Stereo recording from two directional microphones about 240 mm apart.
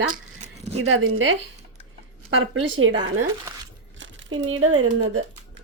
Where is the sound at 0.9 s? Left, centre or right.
Right.